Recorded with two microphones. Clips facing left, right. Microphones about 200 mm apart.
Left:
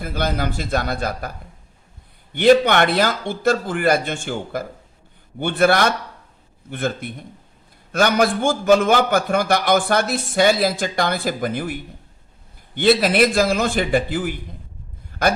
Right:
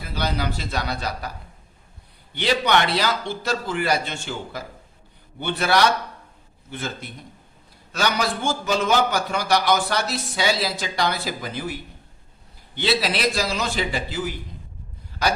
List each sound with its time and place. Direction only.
0.0 s a man's voice: 50° left (ahead or behind)
2.3 s a man's voice: 50° left (ahead or behind)